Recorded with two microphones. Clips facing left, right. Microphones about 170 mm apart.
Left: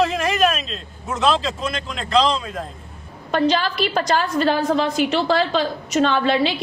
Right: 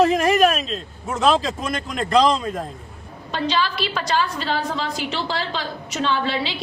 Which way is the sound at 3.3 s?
50° left (ahead or behind).